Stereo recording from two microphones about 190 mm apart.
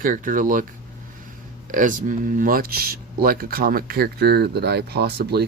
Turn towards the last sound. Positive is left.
turn(degrees=-60)  # may be behind; listen again after turning